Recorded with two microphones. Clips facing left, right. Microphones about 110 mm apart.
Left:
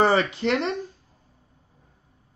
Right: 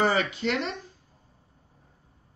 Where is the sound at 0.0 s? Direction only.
35° left (ahead or behind).